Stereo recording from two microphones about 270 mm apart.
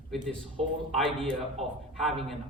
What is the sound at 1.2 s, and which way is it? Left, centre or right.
Speech, centre.